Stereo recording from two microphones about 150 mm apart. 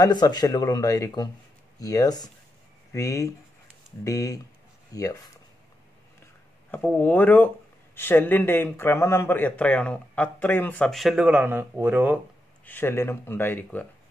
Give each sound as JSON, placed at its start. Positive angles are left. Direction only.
{"t": 0.0, "sound": "speech", "side_deg": 25}
{"t": 6.7, "sound": "speech", "side_deg": 10}
{"t": 12.6, "sound": "speech", "side_deg": 15}